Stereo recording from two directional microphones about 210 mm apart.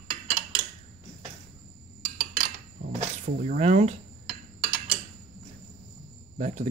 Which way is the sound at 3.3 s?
40° right (ahead or behind).